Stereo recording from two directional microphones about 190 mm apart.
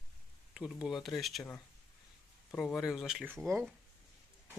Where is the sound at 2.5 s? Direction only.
5° left (ahead or behind).